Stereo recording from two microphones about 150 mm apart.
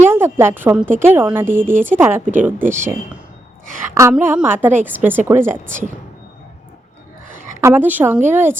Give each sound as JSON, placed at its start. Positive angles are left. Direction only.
{"t": 0.1, "sound": "a woman's voice", "side_deg": -15}
{"t": 2.2, "sound": "speech", "side_deg": -60}
{"t": 2.6, "sound": "a woman's voice", "side_deg": -15}
{"t": 4.4, "sound": "a woman's voice", "side_deg": -15}
{"t": 7.3, "sound": "a woman's voice", "side_deg": -15}